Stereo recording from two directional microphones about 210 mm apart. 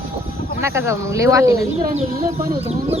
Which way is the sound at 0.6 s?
15° right (ahead or behind).